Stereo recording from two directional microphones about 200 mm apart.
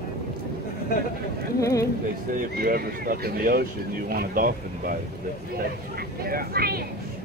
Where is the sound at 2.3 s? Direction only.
45° right (ahead or behind).